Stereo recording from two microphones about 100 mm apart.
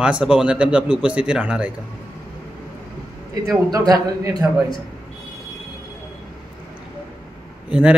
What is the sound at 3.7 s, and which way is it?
Speech, 35° right (ahead or behind).